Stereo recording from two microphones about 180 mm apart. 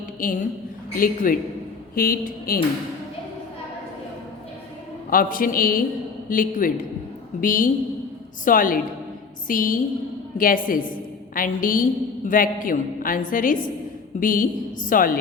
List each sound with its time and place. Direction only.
0.2 s a woman's voice: 50° left (ahead or behind)
5.1 s a woman's voice: 50° left (ahead or behind)